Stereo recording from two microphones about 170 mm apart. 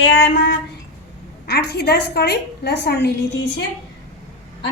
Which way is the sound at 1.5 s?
70° left (ahead or behind).